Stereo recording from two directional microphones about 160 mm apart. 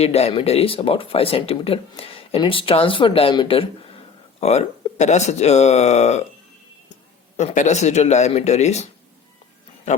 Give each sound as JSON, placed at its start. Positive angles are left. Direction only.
{"t": 0.0, "sound": "speech", "side_deg": 40}
{"t": 7.3, "sound": "speech", "side_deg": 50}